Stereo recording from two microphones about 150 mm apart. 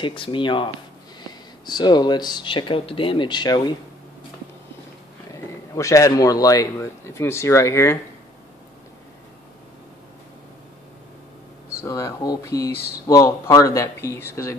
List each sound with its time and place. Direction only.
0.0 s speech: 35° left (ahead or behind)
5.3 s speech: 20° left (ahead or behind)
11.8 s speech: 20° left (ahead or behind)